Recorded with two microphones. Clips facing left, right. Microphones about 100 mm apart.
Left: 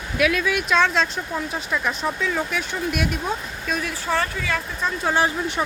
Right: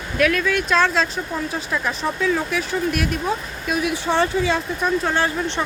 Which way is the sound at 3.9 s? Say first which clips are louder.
Right 6 dB; 25° right (ahead or behind).